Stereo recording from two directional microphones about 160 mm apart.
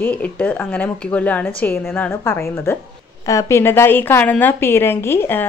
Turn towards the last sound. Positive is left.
turn(degrees=15)  # may be behind; listen again after turning